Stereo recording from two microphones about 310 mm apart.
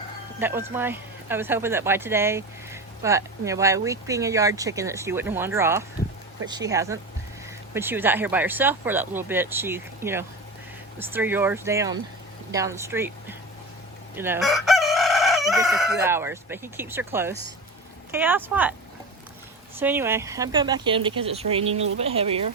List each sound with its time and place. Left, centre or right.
0.3 s speech: centre
14.2 s chicken: centre
15.5 s speech: centre
19.8 s speech: centre